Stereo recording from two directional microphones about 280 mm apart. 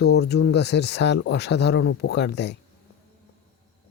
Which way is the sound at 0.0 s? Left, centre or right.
Left.